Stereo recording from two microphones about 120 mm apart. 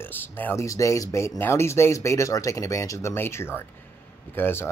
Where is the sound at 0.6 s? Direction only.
25° left (ahead or behind).